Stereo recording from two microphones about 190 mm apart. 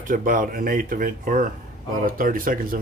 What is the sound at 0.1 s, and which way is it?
Speech, 45° right (ahead or behind).